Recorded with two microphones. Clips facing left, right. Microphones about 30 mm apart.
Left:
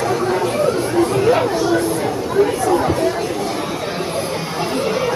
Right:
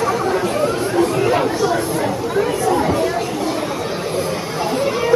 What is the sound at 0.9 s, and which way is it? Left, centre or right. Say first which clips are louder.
Chatter: left 1 dB; centre.